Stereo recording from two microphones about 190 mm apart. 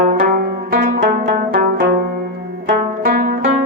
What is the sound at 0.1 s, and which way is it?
Music, 55° right (ahead or behind).